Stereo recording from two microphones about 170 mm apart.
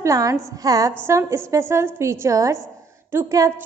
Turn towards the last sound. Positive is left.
turn(degrees=-15)  # may be behind; listen again after turning